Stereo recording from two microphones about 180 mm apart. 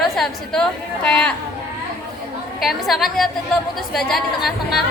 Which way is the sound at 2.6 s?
Centre (ahead or behind).